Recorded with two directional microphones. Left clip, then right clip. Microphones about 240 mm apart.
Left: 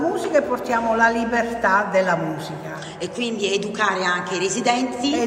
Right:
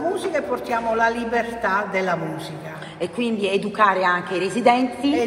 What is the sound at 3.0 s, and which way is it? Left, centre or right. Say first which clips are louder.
Speech: right 1 dB; right.